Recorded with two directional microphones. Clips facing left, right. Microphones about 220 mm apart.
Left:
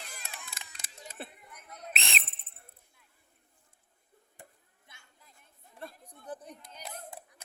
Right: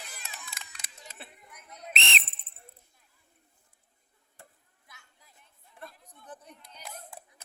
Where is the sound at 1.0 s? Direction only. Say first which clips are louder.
Left 6 dB; 45° left (ahead or behind).